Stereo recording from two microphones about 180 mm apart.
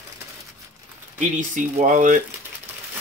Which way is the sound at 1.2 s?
45° right (ahead or behind).